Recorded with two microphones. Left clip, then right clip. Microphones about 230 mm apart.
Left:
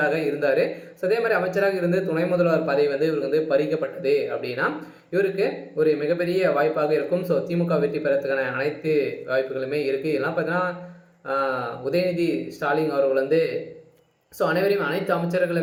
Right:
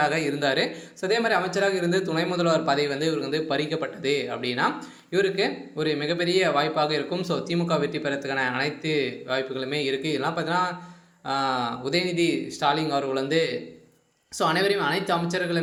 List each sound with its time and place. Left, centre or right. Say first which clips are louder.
0.0 s a man's voice: left 2 dB; right